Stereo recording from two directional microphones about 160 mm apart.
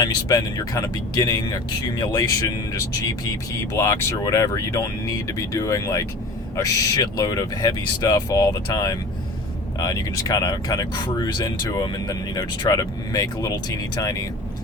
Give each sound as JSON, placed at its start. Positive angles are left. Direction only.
{"t": 0.0, "sound": "speech", "side_deg": 25}
{"t": 3.7, "sound": "speech", "side_deg": 20}